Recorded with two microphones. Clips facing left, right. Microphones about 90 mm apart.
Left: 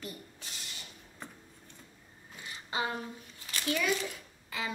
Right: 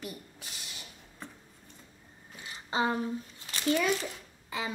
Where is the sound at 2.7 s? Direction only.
30° right (ahead or behind).